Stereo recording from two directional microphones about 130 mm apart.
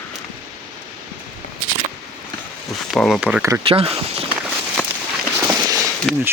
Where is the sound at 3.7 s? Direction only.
45° right (ahead or behind).